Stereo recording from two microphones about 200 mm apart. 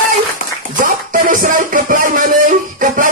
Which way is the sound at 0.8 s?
40° right (ahead or behind).